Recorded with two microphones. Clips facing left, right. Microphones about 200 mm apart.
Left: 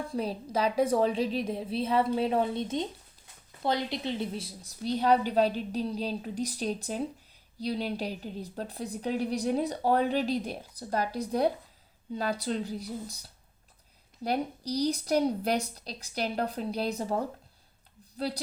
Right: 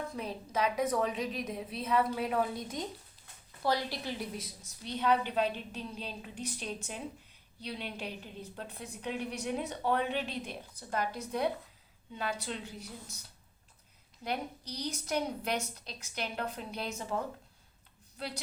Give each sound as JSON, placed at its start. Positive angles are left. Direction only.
{"t": 0.0, "sound": "a woman's voice", "side_deg": 30}
{"t": 14.3, "sound": "a woman's voice", "side_deg": 35}